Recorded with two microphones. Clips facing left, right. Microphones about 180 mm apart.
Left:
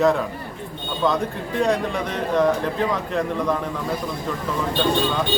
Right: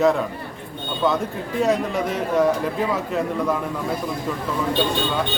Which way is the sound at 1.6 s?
5° right (ahead or behind).